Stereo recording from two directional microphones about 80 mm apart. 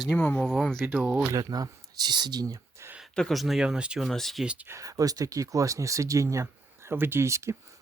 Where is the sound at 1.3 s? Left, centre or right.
Right.